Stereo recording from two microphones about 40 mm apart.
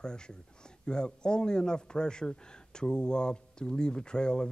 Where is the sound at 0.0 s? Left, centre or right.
Left.